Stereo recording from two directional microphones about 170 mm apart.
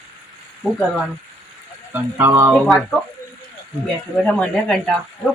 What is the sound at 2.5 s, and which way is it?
Speech, centre (ahead or behind).